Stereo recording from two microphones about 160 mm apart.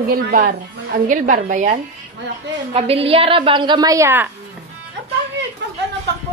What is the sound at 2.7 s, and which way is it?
A woman's voice, 40° right (ahead or behind).